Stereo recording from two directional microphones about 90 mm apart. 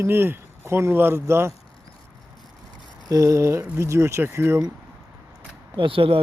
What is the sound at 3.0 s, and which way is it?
Speech, 40° right (ahead or behind).